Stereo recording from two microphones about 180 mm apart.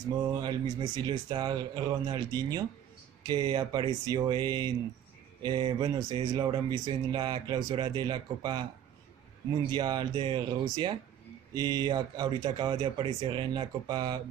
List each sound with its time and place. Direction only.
0.3 s speech: 25° right (ahead or behind)
9.7 s speech: 25° right (ahead or behind)